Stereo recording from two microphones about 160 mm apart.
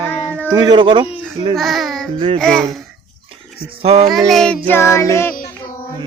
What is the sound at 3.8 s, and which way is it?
Speech, 40° right (ahead or behind).